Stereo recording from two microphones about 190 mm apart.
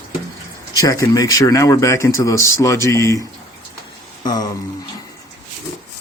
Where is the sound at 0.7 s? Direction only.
20° left (ahead or behind).